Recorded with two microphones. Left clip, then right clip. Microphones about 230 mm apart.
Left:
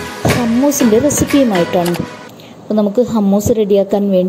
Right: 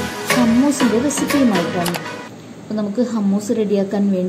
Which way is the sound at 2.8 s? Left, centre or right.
Left.